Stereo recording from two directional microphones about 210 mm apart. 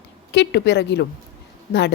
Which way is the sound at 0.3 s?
55° left (ahead or behind).